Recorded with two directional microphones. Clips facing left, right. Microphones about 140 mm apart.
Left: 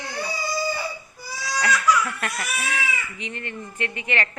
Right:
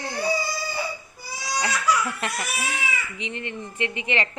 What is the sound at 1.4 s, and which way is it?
Baby cry, 20° right (ahead or behind).